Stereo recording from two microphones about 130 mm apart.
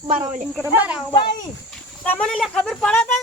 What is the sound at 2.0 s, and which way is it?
Speech, 15° left (ahead or behind).